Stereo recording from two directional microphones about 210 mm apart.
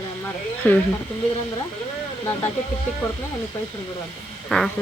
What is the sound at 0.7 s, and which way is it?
Speech, 10° left (ahead or behind).